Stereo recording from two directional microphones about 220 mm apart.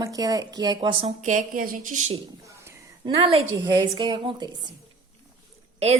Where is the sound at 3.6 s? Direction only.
20° right (ahead or behind).